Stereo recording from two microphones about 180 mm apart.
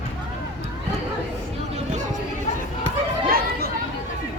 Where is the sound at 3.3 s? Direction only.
60° right (ahead or behind).